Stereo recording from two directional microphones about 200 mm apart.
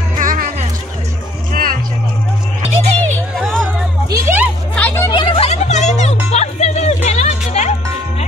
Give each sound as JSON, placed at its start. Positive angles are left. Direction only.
{"t": 0.2, "sound": "music", "side_deg": -45}
{"t": 3.3, "sound": "hubbub", "side_deg": 0}
{"t": 4.1, "sound": "music", "side_deg": -10}
{"t": 4.7, "sound": "chatter", "side_deg": 10}
{"t": 5.1, "sound": "music", "side_deg": 25}